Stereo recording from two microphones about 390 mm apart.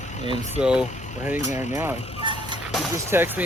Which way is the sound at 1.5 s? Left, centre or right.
Centre.